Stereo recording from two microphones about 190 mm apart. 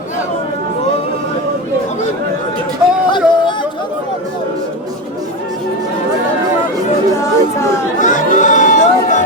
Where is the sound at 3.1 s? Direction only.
25° left (ahead or behind).